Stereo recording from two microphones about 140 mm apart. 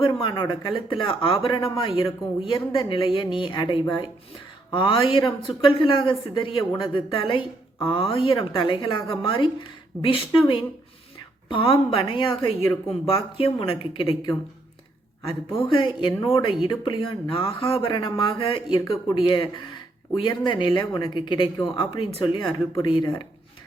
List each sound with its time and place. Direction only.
0.0 s a woman's voice: 35° left (ahead or behind)
15.5 s a woman's voice: 35° left (ahead or behind)